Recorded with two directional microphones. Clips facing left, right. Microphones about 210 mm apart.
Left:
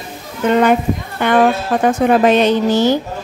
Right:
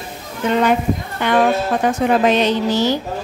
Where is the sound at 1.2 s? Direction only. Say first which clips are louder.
Left 2 dB; 50° left (ahead or behind).